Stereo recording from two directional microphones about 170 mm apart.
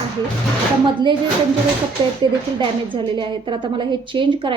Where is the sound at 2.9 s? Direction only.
30° right (ahead or behind).